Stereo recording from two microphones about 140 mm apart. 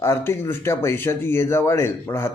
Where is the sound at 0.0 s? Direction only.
15° left (ahead or behind).